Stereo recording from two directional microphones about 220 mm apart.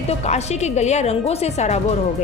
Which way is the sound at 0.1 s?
30° left (ahead or behind).